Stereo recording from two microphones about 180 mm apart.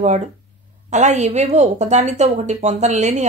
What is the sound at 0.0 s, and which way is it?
A woman's voice, 40° right (ahead or behind).